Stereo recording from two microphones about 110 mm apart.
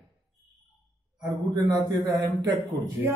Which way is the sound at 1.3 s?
40° right (ahead or behind).